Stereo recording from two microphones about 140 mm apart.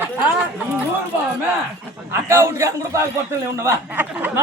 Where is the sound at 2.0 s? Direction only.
20° right (ahead or behind).